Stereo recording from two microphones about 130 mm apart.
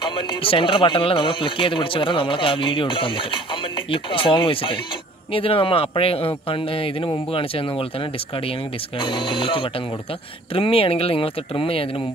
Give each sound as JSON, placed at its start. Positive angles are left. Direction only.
{"t": 0.0, "sound": "a man's voice", "side_deg": 40}
{"t": 9.1, "sound": "a man's voice", "side_deg": 35}